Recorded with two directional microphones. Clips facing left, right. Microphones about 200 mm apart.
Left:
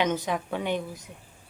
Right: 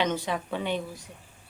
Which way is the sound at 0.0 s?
10° left (ahead or behind).